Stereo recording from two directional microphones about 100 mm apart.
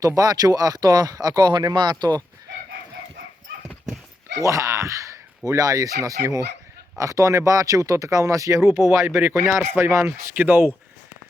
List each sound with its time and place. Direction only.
0.0 s speech: 35° right (ahead or behind)
4.4 s speech: 30° right (ahead or behind)